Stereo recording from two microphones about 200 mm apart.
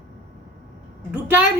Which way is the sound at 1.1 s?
10° right (ahead or behind).